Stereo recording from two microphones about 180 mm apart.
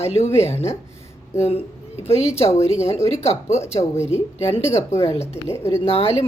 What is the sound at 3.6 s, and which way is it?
Speech, 15° left (ahead or behind).